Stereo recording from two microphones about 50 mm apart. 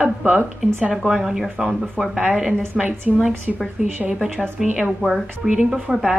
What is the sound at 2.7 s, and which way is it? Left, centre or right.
Speech, right.